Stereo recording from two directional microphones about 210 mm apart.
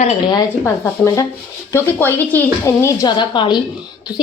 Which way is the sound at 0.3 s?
15° left (ahead or behind).